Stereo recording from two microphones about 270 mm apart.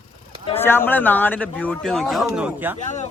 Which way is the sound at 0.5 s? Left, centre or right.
Centre.